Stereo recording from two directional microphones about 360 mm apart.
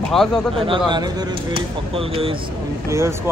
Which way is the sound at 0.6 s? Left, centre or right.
Centre.